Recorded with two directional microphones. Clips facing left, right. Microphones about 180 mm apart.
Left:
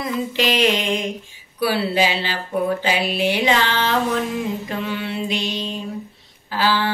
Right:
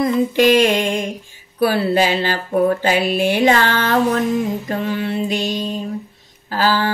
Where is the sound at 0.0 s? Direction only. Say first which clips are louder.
Right 8 dB; 50° right (ahead or behind).